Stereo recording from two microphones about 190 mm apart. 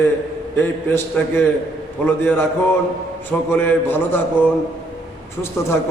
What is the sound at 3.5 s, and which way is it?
Speech, 10° left (ahead or behind).